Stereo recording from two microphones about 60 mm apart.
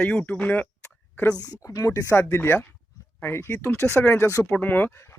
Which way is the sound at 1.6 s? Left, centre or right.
Left.